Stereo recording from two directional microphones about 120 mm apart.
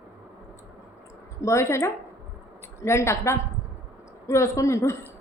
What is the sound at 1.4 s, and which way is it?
A woman's voice, 25° left (ahead or behind).